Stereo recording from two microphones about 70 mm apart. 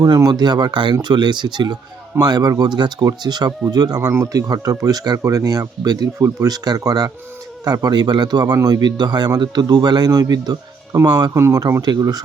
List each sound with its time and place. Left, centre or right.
0.3 s a man's voice: right
3.1 s speech: right
3.7 s speech: right
6.1 s speech: right
6.5 s speech: right
11.8 s a man's voice: right